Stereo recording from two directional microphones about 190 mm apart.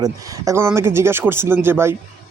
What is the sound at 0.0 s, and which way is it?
Speech, 15° right (ahead or behind).